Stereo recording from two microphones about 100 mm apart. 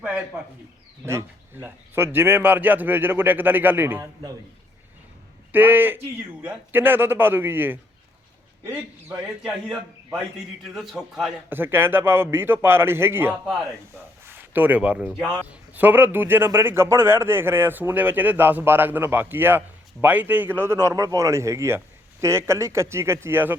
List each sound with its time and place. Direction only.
1.0 s a man's voice: 25° right (ahead or behind)
5.5 s a man's voice: 20° right (ahead or behind)
10.8 s a man's voice: 5° right (ahead or behind)
11.4 s a man's voice: 20° right (ahead or behind)